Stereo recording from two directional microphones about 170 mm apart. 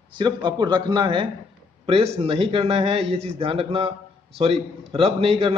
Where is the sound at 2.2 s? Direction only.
35° right (ahead or behind).